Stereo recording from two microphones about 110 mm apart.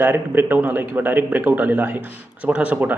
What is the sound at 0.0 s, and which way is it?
A man's voice, 20° right (ahead or behind).